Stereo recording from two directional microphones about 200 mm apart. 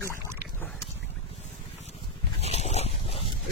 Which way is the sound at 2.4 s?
30° left (ahead or behind).